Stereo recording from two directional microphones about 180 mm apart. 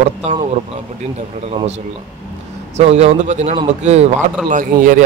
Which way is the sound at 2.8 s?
35° right (ahead or behind).